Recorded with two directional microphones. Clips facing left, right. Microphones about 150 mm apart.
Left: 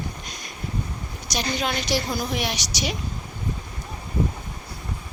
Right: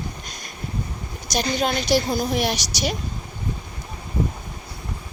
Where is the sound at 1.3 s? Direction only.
40° right (ahead or behind).